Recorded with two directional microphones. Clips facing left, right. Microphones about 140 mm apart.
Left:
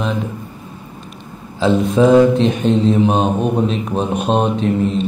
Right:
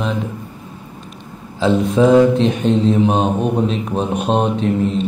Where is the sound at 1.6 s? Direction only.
20° left (ahead or behind).